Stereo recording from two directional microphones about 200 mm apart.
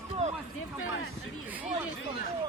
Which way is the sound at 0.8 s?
85° left.